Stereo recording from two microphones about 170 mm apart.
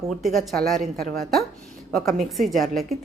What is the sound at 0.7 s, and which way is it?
Speech, 60° right (ahead or behind).